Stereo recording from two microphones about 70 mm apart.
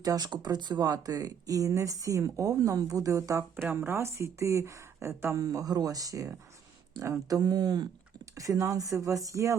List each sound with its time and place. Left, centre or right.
0.0 s speech: right
3.5 s speech: right
5.4 s speech: right
8.4 s speech: right